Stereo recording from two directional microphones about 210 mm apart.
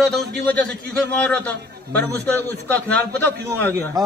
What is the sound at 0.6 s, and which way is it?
Speech, 5° left (ahead or behind).